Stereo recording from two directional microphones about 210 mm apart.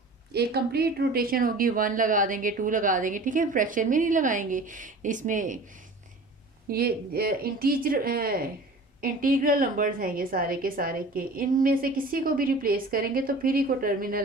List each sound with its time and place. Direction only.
0.3 s speech: 50° right (ahead or behind)
6.7 s a woman's voice: 45° right (ahead or behind)